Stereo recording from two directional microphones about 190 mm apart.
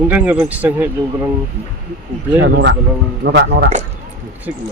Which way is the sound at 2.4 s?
60° right (ahead or behind).